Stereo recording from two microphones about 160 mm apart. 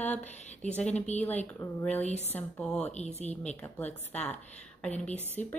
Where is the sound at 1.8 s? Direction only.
10° left (ahead or behind).